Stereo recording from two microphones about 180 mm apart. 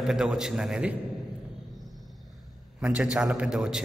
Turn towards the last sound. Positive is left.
turn(degrees=-5)  # may be behind; listen again after turning